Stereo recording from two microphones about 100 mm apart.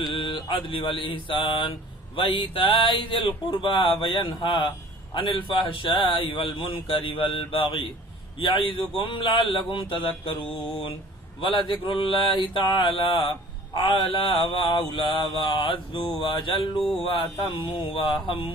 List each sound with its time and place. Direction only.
0.0 s a man's voice: 55° left (ahead or behind)
2.1 s mantra: 55° left (ahead or behind)
2.5 s a man's voice: 60° left (ahead or behind)